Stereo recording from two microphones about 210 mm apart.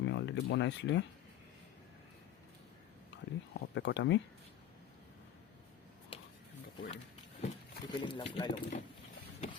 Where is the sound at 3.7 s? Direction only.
60° left (ahead or behind).